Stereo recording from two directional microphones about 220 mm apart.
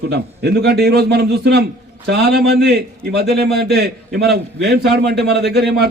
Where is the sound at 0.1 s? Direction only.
45° right (ahead or behind).